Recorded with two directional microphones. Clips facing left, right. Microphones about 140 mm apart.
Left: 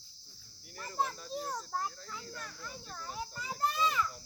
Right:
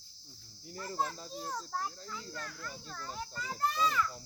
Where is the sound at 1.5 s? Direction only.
10° left (ahead or behind).